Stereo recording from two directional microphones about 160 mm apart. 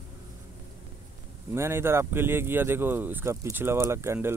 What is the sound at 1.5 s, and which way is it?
Speech, 15° right (ahead or behind).